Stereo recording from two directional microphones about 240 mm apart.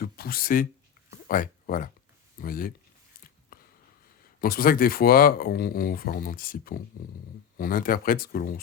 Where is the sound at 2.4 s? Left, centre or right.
Left.